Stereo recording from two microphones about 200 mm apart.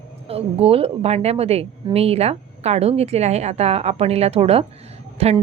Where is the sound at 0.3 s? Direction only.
30° right (ahead or behind).